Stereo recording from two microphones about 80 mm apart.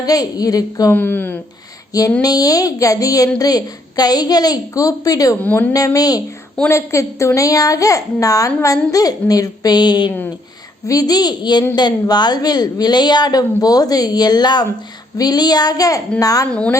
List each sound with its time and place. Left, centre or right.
0.0 s a woman's voice: left
0.9 s speech: left
1.9 s a sound: left
2.2 s a woman's voice: left
5.4 s speech: centre
5.7 s a woman's voice: left
10.8 s a woman's voice: left
16.5 s speech: centre